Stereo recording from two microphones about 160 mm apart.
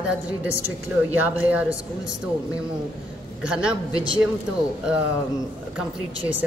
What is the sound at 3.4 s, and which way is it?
Speech, 5° right (ahead or behind).